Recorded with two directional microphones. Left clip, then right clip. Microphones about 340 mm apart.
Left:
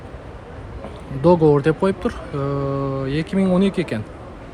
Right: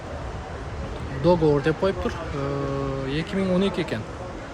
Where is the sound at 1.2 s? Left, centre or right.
Centre.